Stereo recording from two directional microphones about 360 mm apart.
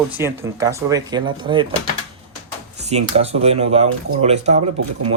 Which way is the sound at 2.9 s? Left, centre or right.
Centre.